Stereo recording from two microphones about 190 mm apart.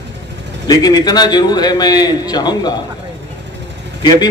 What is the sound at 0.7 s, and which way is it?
A man's voice, 20° left (ahead or behind).